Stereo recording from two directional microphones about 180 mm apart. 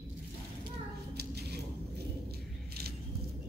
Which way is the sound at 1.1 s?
65° right (ahead or behind).